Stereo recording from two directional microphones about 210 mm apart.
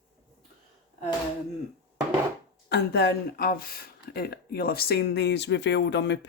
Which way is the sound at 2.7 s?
50° left (ahead or behind).